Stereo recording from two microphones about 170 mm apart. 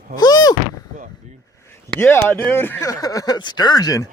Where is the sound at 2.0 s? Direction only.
15° left (ahead or behind).